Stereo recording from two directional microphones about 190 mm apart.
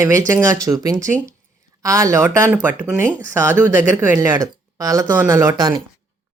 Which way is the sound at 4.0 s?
10° right (ahead or behind).